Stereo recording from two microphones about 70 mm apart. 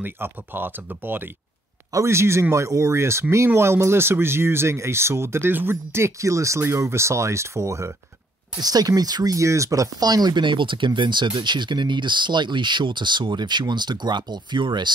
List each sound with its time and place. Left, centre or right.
0.0 s speech: right
2.0 s speech: right
8.5 s speech: right
10.9 s speech: right